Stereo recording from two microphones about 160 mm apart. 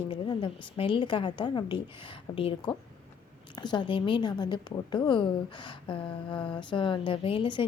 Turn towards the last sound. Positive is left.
turn(degrees=30)  # may be behind; listen again after turning